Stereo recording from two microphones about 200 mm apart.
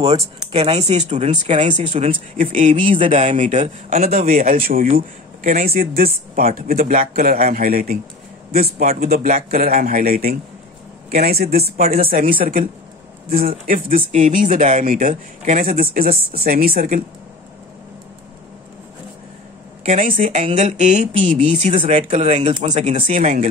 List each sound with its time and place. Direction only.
0.0 s a man's voice: 30° right (ahead or behind); by 17.0 s 45° right (ahead or behind)
19.8 s speech: 40° right (ahead or behind)
21.7 s speech: 30° right (ahead or behind)